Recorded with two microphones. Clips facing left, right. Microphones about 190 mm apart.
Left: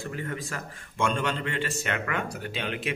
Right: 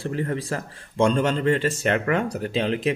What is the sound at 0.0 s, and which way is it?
Speech, 35° right (ahead or behind).